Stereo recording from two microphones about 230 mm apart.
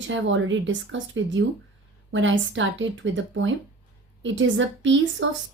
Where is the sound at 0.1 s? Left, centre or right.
Right.